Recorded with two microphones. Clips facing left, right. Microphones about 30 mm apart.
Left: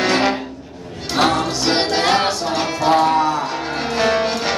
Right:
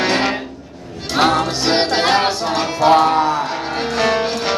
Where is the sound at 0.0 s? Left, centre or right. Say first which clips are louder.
Even; centre.